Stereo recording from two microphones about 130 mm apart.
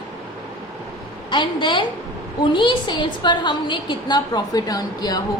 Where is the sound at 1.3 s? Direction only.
40° left (ahead or behind).